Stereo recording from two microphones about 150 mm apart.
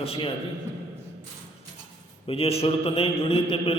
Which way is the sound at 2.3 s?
40° left (ahead or behind).